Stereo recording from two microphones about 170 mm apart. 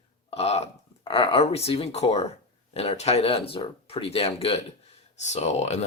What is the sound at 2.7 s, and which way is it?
Speech, 35° left (ahead or behind).